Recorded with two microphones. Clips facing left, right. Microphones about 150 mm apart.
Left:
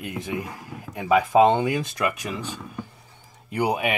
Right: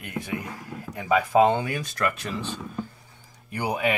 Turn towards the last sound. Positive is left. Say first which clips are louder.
# left 2 dB
turn(degrees=20)  # may be behind; listen again after turning